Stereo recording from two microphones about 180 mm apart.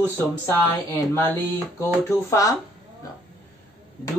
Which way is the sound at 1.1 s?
15° left (ahead or behind).